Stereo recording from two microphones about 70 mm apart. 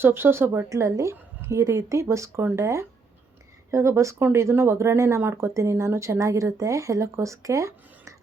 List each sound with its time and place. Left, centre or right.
0.0 s speech: right
0.7 s speech: right